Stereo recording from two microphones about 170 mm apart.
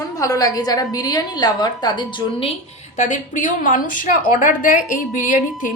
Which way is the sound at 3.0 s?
45° left (ahead or behind).